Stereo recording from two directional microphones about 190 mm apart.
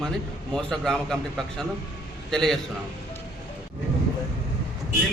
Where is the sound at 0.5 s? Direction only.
Centre (ahead or behind).